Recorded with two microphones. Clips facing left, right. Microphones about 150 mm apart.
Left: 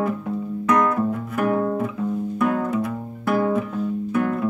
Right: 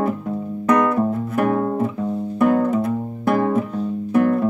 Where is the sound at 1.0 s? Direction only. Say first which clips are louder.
Right 3 dB; 30° right (ahead or behind).